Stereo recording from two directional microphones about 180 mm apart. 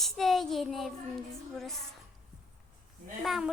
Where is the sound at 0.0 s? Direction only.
Centre (ahead or behind).